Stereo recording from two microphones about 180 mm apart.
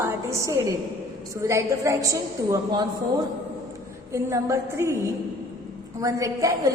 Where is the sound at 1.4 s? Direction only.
15° right (ahead or behind).